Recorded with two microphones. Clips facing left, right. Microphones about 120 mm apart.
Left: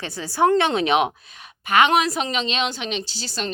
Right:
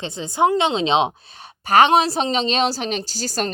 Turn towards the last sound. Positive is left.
turn(degrees=-45)  # may be behind; listen again after turning